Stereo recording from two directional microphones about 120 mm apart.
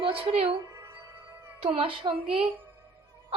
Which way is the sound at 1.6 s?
50° right (ahead or behind).